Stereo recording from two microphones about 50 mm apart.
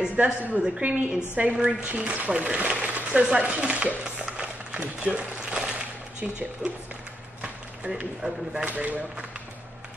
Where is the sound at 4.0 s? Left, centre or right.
Centre.